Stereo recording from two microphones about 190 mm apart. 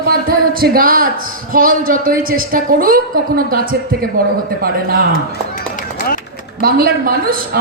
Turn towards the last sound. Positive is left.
turn(degrees=-50)  # may be behind; listen again after turning